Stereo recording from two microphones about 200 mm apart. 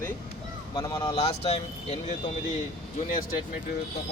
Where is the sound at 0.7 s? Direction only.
20° left (ahead or behind).